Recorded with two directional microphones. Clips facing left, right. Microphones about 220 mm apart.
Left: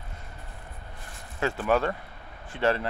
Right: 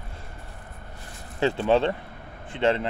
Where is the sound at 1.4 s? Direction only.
25° right (ahead or behind).